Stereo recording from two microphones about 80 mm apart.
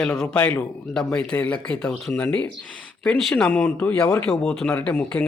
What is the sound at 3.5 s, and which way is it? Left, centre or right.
Speech, centre.